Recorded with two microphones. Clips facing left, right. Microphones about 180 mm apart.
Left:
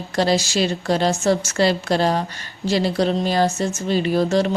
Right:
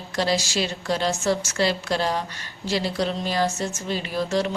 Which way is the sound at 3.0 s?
30° left (ahead or behind).